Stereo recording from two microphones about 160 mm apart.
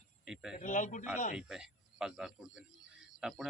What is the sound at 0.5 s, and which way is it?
Speech, 55° left (ahead or behind).